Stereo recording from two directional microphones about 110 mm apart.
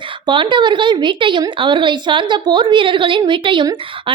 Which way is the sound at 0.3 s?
45° right (ahead or behind).